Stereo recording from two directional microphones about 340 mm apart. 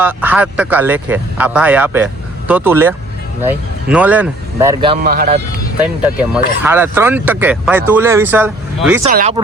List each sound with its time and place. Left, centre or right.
0.0 s speech: centre
5.0 s speech: right
6.3 s speech: centre
9.0 s speech: right